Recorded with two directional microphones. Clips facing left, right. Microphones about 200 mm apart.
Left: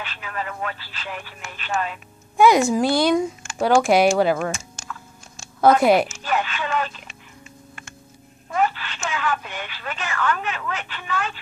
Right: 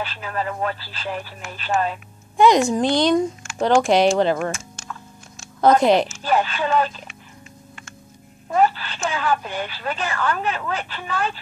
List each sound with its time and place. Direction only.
0.0 s speech: 35° right (ahead or behind)
2.3 s a woman's voice: 5° left (ahead or behind)
5.6 s speech: 5° left (ahead or behind)
6.2 s speech: 35° right (ahead or behind)
8.5 s speech: 35° right (ahead or behind)